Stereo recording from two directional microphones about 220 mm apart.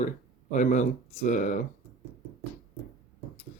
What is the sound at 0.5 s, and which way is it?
Speech, 35° left (ahead or behind).